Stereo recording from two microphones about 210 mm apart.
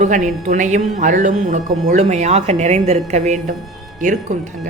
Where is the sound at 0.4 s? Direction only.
35° right (ahead or behind).